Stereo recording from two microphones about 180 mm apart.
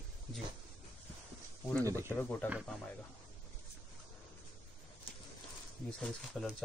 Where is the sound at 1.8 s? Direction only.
15° right (ahead or behind).